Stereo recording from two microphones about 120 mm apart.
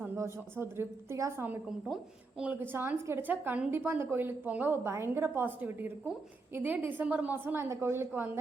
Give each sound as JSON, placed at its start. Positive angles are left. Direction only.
{"t": 0.2, "sound": "a woman's voice", "side_deg": -20}